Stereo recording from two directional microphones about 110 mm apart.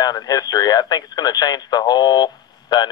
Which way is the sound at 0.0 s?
35° left (ahead or behind).